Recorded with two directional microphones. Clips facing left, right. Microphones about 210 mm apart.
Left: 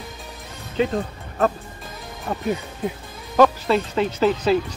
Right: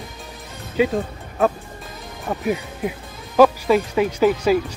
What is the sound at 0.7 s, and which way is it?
Speech, 10° right (ahead or behind).